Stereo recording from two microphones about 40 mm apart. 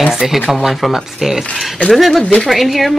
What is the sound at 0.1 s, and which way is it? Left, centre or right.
Speech, centre.